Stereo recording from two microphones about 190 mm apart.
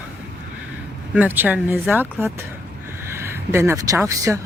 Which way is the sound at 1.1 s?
10° right (ahead or behind).